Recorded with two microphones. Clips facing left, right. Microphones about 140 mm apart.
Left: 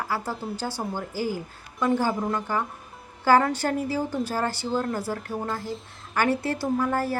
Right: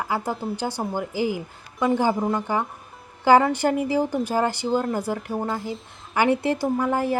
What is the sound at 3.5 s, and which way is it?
A woman's voice, 15° right (ahead or behind).